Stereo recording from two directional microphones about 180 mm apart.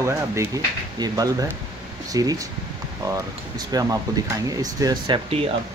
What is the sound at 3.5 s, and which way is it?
Speech, 20° right (ahead or behind).